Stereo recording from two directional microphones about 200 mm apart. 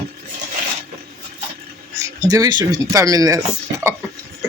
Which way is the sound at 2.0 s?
15° right (ahead or behind).